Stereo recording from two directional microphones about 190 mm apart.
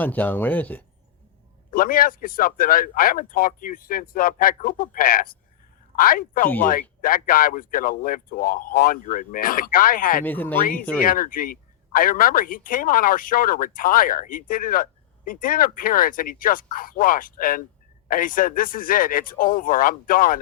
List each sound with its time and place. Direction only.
0.0 s speech: 10° left (ahead or behind)
1.7 s a man's voice: 45° left (ahead or behind)
10.2 s speech: 10° left (ahead or behind)
11.0 s a man's voice: 50° left (ahead or behind)